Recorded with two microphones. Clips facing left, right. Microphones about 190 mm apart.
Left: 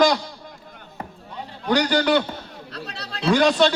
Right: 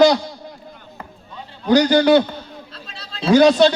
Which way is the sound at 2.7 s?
65° left (ahead or behind).